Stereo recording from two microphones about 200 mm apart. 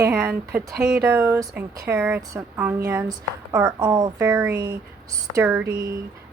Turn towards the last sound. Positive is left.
turn(degrees=-15)  # may be behind; listen again after turning